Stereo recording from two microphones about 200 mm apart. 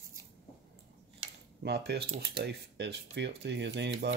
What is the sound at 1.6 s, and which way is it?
Speech, 55° right (ahead or behind).